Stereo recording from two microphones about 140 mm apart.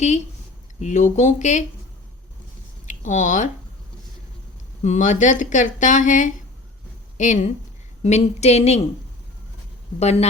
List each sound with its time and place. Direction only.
0.8 s speech: 60° left (ahead or behind)
2.8 s speech: 65° left (ahead or behind)
4.8 s speech: 60° left (ahead or behind)
8.0 s speech: 50° left (ahead or behind)
10.0 s speech: 50° left (ahead or behind)